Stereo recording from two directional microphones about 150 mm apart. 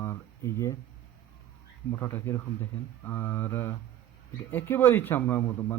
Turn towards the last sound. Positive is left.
turn(degrees=15)  # may be behind; listen again after turning